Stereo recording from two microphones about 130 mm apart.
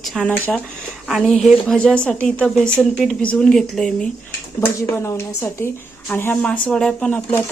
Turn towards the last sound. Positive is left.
turn(degrees=10)  # may be behind; listen again after turning